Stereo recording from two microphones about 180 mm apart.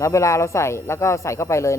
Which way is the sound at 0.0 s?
15° left (ahead or behind).